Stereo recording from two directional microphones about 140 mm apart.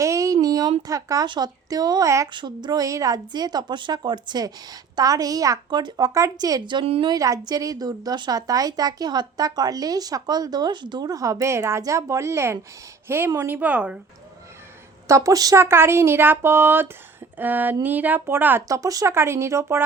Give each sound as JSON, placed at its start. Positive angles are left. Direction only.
{"t": 0.0, "sound": "a sound", "side_deg": -20}
{"t": 0.8, "sound": "a woman's voice", "side_deg": -25}
{"t": 6.8, "sound": "a woman's voice", "side_deg": -45}
{"t": 7.1, "sound": "a woman's voice", "side_deg": -25}
{"t": 15.0, "sound": "speech", "side_deg": -20}